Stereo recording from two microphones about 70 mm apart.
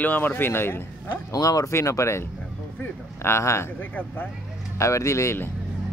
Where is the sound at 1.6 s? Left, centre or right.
Left.